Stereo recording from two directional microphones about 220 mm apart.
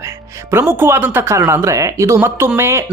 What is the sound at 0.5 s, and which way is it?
Speech, 10° right (ahead or behind).